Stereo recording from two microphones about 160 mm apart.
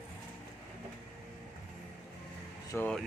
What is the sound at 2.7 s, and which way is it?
Speech, 10° left (ahead or behind).